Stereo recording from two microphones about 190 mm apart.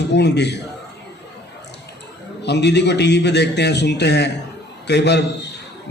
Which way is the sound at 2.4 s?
65° left (ahead or behind).